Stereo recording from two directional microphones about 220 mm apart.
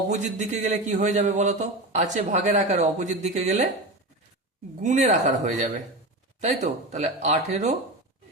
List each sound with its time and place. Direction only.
0.1 s speech: 30° right (ahead or behind)
4.8 s speech: 35° right (ahead or behind)